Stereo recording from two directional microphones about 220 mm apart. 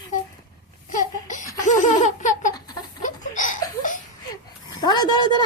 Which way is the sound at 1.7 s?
35° left (ahead or behind).